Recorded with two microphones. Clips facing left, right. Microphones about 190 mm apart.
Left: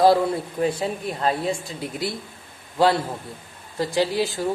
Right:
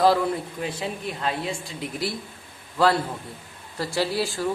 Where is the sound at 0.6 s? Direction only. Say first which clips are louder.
Left 9 dB; 40° left (ahead or behind).